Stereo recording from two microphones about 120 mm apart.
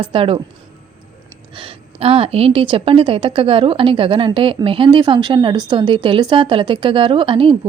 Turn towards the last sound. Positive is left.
turn(degrees=-45)  # may be behind; listen again after turning